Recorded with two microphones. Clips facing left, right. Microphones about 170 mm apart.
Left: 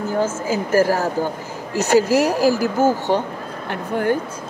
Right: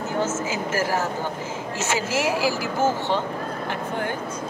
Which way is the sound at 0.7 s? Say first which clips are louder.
Left 9 dB; 40° left (ahead or behind).